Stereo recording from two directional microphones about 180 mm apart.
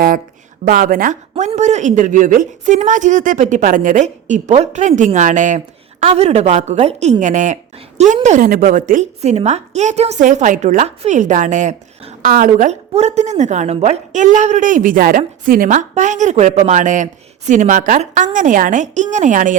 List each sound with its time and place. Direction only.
0.6 s speech: 50° right (ahead or behind)